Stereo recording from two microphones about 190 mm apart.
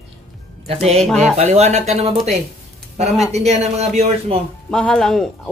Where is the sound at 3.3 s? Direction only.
35° right (ahead or behind).